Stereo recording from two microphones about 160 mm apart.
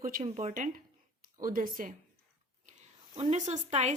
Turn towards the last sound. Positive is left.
turn(degrees=-45)  # may be behind; listen again after turning